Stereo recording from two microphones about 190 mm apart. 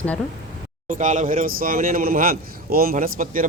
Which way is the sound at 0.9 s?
40° right (ahead or behind).